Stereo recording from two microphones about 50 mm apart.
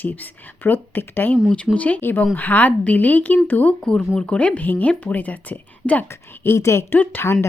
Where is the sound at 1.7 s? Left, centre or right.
Left.